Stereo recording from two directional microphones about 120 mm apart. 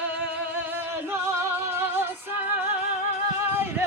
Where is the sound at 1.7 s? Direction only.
20° right (ahead or behind).